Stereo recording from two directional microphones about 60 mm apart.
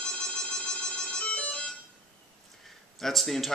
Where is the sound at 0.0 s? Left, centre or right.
Centre.